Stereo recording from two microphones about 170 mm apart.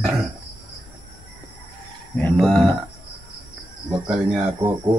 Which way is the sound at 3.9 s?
5° right (ahead or behind).